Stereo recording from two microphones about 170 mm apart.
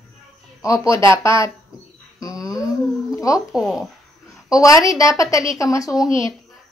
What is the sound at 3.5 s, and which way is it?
Speech, centre (ahead or behind).